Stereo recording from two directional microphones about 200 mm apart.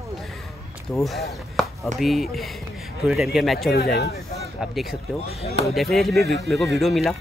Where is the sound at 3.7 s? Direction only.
50° left (ahead or behind).